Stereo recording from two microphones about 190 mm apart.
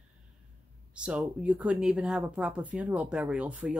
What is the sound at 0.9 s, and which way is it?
Speech, 5° right (ahead or behind).